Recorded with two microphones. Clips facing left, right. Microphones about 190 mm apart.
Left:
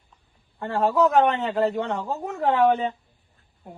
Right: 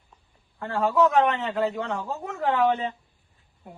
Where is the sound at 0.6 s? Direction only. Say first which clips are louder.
Left 1 dB; 35° left (ahead or behind).